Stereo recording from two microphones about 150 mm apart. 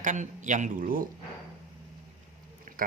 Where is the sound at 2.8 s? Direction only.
65° right (ahead or behind).